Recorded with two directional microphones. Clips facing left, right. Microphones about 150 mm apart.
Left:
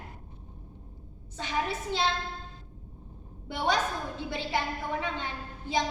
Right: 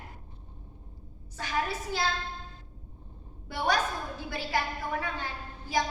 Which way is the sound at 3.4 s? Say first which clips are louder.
Even; 20° left (ahead or behind).